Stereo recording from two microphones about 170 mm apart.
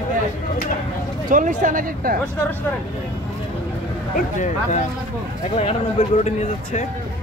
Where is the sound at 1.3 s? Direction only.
50° right (ahead or behind).